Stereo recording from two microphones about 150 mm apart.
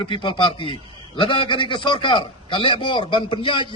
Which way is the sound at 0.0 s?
35° left (ahead or behind).